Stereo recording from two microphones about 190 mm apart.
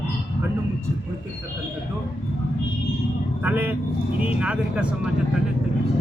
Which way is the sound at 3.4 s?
10° right (ahead or behind).